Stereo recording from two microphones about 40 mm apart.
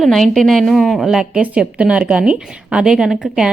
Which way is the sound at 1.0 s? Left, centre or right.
Centre.